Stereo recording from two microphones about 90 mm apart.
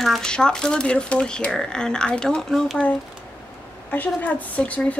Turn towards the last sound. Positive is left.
turn(degrees=15)  # may be behind; listen again after turning